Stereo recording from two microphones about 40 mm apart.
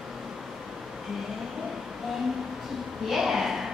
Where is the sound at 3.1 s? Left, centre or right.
Centre.